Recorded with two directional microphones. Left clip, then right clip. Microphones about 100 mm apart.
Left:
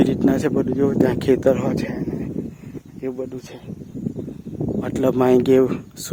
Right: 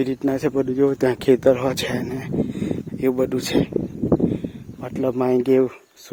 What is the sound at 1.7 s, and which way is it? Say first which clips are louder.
Speech: right 1 dB; 40° right (ahead or behind).